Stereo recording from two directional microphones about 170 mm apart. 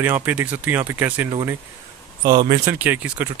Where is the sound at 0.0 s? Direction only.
10° right (ahead or behind).